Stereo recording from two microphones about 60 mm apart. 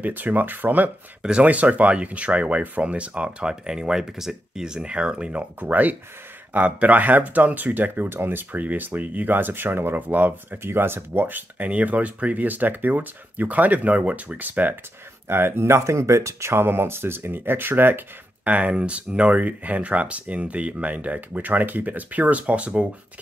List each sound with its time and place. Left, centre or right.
0.0 s speech: right
5.6 s speech: right
15.2 s speech: right
18.5 s speech: right